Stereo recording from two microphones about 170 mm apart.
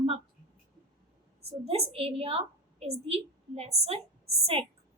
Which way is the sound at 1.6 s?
35° right (ahead or behind).